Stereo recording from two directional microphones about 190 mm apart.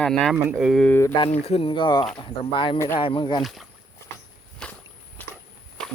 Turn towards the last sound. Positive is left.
turn(degrees=10)  # may be behind; listen again after turning